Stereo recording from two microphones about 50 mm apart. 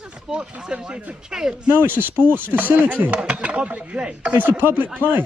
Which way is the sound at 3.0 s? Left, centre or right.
Right.